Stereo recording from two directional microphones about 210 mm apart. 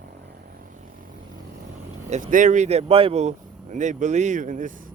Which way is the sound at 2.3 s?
35° right (ahead or behind).